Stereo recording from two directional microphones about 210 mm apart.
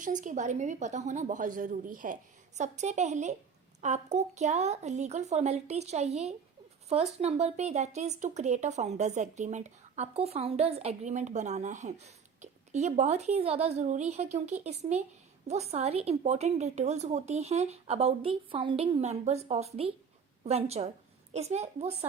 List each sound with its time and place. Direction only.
0.0 s a woman's voice: 35° right (ahead or behind)